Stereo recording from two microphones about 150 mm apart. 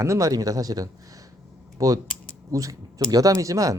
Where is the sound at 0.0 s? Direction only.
20° right (ahead or behind).